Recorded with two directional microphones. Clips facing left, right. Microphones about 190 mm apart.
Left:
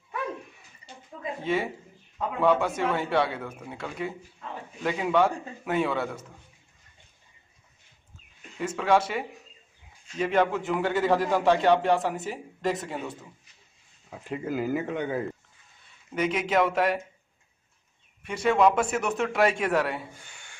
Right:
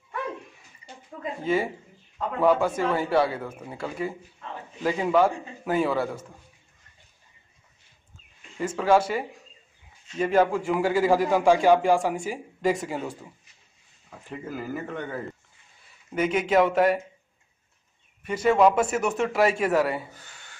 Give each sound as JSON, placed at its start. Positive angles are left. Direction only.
{"t": 1.4, "sound": "a man's voice", "side_deg": 0}
{"t": 8.5, "sound": "a man's voice", "side_deg": -5}
{"t": 14.3, "sound": "speech", "side_deg": 15}
{"t": 16.2, "sound": "a man's voice", "side_deg": 0}
{"t": 18.2, "sound": "a man's voice", "side_deg": -5}